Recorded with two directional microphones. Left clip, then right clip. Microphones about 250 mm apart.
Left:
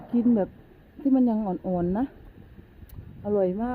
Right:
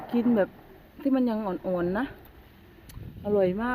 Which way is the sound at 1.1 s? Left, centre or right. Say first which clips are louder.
Left 3 dB; centre.